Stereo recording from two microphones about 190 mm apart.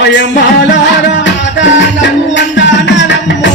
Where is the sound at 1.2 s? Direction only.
70° left (ahead or behind).